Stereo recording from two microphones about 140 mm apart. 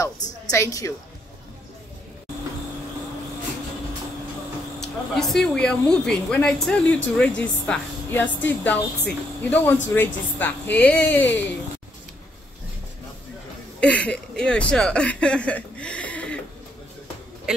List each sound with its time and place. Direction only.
0.5 s a woman's voice: 25° left (ahead or behind)
4.7 s a woman's voice: 5° left (ahead or behind)
13.7 s speech: 10° left (ahead or behind)
17.5 s speech: 5° right (ahead or behind)